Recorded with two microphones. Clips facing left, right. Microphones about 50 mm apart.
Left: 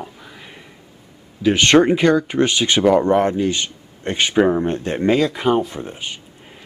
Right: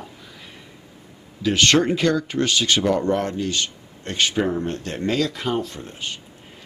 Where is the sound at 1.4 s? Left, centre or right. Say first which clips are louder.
Left 5 dB; left.